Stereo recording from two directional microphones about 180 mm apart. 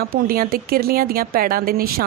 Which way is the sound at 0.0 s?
55° right (ahead or behind).